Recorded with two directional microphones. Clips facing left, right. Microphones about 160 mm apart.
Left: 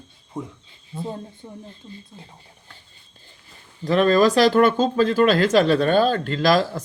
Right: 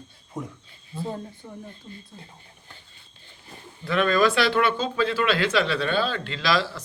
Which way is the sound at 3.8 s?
40° left (ahead or behind).